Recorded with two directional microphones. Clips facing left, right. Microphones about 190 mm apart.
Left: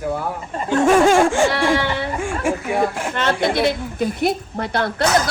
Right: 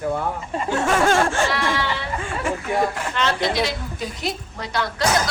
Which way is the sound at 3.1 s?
50° left (ahead or behind).